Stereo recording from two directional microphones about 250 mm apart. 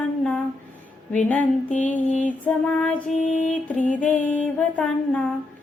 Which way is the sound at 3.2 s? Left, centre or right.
Left.